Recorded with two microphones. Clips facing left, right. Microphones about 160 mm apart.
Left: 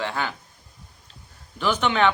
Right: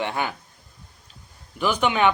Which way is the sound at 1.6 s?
10° right (ahead or behind).